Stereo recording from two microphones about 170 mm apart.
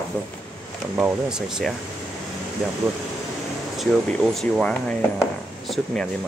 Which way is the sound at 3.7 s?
Centre (ahead or behind).